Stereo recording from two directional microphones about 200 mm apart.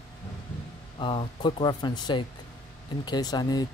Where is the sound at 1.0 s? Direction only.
25° left (ahead or behind).